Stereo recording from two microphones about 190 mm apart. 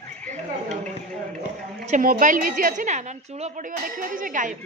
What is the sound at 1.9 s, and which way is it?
A woman's voice, 45° right (ahead or behind).